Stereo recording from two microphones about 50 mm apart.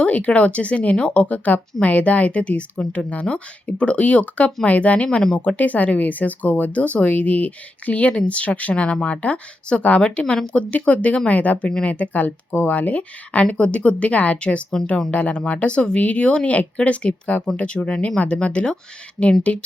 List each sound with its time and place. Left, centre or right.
0.0 s speech: left
5.2 s speech: centre
5.5 s speech: left